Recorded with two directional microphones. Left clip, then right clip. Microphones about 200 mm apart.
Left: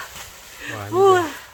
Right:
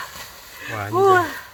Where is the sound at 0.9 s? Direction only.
25° left (ahead or behind).